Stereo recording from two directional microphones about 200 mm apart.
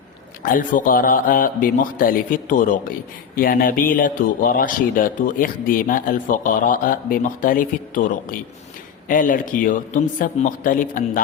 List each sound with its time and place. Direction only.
0.4 s speech: 45° left (ahead or behind)